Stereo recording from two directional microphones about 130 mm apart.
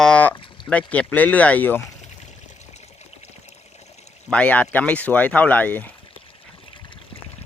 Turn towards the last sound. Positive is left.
turn(degrees=10)  # may be behind; listen again after turning